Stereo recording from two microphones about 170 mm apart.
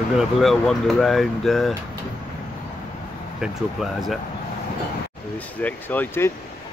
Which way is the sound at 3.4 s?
Centre (ahead or behind).